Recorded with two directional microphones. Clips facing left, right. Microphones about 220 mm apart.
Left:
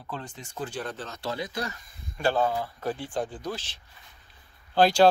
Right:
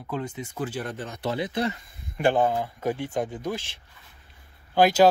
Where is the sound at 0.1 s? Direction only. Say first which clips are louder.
Right 7 dB; 5° right (ahead or behind).